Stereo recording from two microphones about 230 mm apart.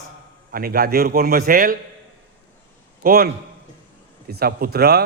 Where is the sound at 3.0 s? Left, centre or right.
Right.